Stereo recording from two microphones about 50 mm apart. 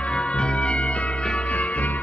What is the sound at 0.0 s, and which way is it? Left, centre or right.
Music, left.